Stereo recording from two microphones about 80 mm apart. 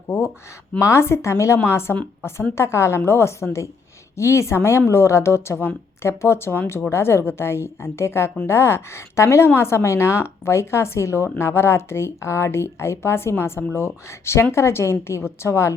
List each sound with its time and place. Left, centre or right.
0.8 s a woman's voice: left